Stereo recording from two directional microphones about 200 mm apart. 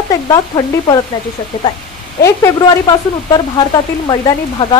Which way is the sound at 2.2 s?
15° left (ahead or behind).